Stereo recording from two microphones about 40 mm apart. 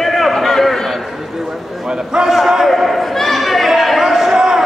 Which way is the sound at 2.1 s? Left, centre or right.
Centre.